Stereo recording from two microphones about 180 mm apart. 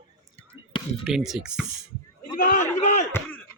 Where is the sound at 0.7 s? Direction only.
25° left (ahead or behind).